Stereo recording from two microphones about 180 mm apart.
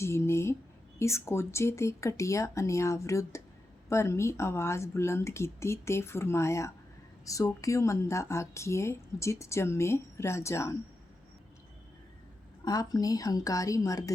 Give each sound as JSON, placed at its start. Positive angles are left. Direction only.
{"t": 0.0, "sound": "a sound", "side_deg": 15}
{"t": 0.9, "sound": "speech", "side_deg": 15}
{"t": 12.6, "sound": "a woman's voice", "side_deg": 20}